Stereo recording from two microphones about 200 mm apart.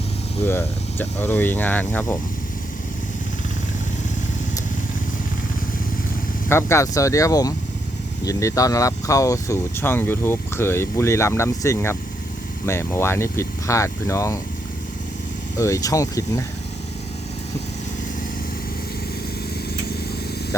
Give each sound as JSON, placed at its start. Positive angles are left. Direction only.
{"t": 0.4, "sound": "speech", "side_deg": 10}
{"t": 6.5, "sound": "speech", "side_deg": 15}
{"t": 15.5, "sound": "speech", "side_deg": 15}